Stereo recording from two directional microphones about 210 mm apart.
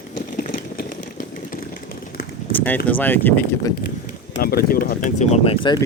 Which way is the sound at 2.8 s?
10° left (ahead or behind).